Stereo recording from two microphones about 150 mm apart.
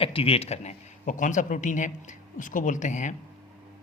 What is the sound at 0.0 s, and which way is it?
Speech, 40° left (ahead or behind).